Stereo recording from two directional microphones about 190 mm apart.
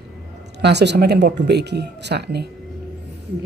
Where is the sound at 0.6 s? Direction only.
65° right (ahead or behind).